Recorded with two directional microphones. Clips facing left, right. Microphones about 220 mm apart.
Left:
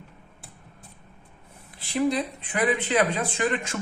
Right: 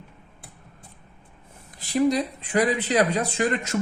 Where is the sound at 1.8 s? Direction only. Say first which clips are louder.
Right 3 dB; 40° right (ahead or behind).